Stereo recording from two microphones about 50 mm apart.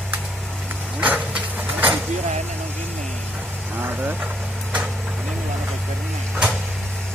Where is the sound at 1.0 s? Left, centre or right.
Right.